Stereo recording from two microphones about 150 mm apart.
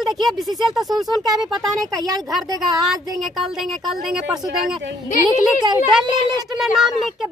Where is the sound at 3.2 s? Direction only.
Centre (ahead or behind).